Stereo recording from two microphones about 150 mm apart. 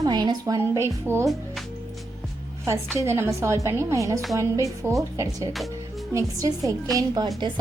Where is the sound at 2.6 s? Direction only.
20° right (ahead or behind).